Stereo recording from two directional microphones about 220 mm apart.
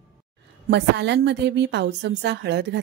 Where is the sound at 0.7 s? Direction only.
50° right (ahead or behind).